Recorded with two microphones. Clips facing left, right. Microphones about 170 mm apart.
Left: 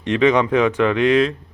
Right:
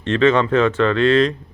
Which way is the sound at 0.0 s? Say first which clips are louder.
Even; 15° left (ahead or behind).